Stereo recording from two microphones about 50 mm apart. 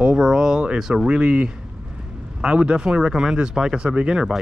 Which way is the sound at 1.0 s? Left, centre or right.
Right.